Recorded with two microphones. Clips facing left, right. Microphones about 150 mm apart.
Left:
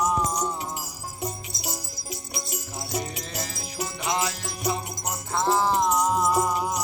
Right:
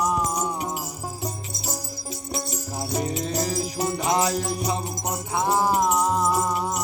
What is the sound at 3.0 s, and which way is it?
Music, 35° right (ahead or behind).